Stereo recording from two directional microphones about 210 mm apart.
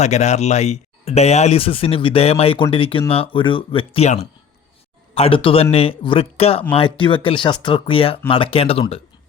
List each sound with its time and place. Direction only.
0.0 s speech: 30° left (ahead or behind)